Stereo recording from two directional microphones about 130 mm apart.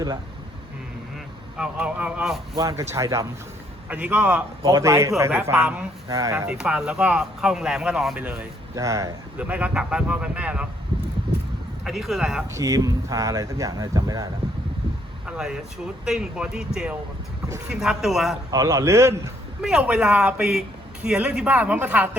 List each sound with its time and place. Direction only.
1.5 s speech: 5° right (ahead or behind)
2.6 s speech: 25° right (ahead or behind)
3.8 s speech: 10° right (ahead or behind)
4.6 s speech: 25° right (ahead or behind)
6.5 s speech: 10° right (ahead or behind)
8.7 s speech: 25° right (ahead or behind)
9.4 s speech: 10° right (ahead or behind)
11.9 s speech: centre (ahead or behind)
12.5 s speech: 25° right (ahead or behind)
15.3 s speech: 5° right (ahead or behind)
18.5 s speech: 25° right (ahead or behind)
19.6 s speech: 5° right (ahead or behind)